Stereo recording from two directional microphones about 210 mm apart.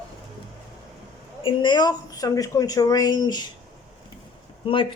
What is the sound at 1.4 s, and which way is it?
Speech, 20° left (ahead or behind).